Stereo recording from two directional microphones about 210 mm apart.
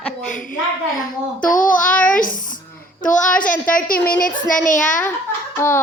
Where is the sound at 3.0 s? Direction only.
35° left (ahead or behind).